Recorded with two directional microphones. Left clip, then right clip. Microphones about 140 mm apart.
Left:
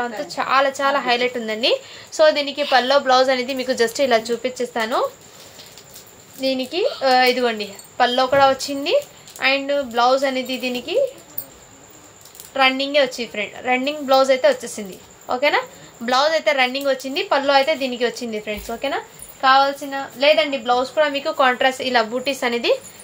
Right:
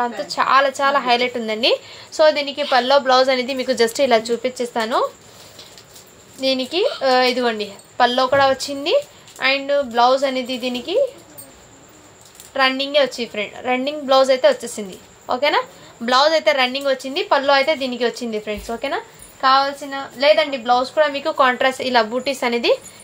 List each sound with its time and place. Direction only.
0.0 s a woman's voice: 30° right (ahead or behind)
2.2 s a woman's voice: 10° right (ahead or behind); by 5.0 s 25° right (ahead or behind)
6.4 s a woman's voice: 25° right (ahead or behind)
12.5 s a woman's voice: 25° right (ahead or behind)